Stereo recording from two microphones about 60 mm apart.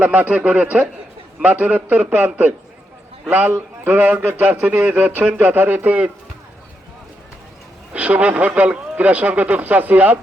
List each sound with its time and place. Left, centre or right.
0.0 s a man's voice: right
7.9 s a man's voice: right